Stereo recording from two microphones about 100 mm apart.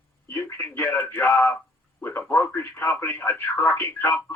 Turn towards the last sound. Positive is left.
turn(degrees=20)  # may be behind; listen again after turning